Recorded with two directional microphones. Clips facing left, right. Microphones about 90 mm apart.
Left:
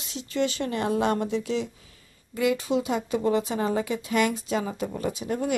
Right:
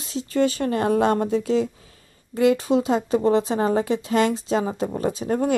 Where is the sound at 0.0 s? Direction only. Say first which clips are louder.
Right 6 dB; 35° right (ahead or behind).